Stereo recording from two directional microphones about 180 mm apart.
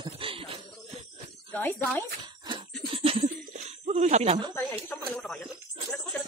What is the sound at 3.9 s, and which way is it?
Speech, 40° right (ahead or behind).